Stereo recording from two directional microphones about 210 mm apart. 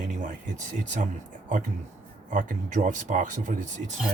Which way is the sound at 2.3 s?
35° right (ahead or behind).